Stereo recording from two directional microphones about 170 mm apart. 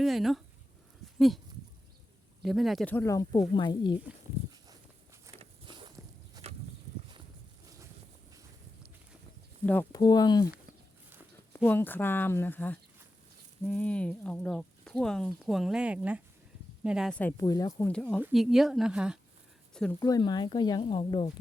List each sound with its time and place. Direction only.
0.0 s speech: centre (ahead or behind)
2.4 s speech: centre (ahead or behind)
2.9 s speech: 15° left (ahead or behind)
5.4 s a sound: 30° right (ahead or behind)
9.9 s speech: 25° left (ahead or behind)
11.5 s speech: 15° left (ahead or behind); by 17.1 s 5° right (ahead or behind)
17.1 s speech: 10° left (ahead or behind)
17.4 s speech: 20° left (ahead or behind)
17.8 s speech: 5° left (ahead or behind)
20.0 s speech: 20° left (ahead or behind)